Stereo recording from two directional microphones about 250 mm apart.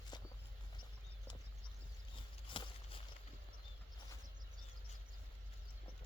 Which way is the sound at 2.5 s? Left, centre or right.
Centre.